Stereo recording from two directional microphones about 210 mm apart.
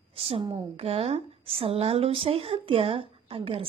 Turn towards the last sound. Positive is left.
turn(degrees=-25)  # may be behind; listen again after turning